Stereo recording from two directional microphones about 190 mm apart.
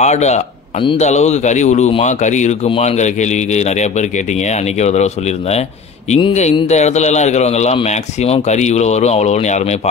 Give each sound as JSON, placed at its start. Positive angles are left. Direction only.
{"t": 0.0, "sound": "a man's voice", "side_deg": 35}